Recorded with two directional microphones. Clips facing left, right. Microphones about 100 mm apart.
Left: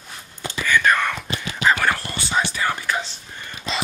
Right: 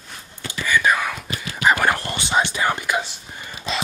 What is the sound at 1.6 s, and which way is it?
Whispering, 15° right (ahead or behind).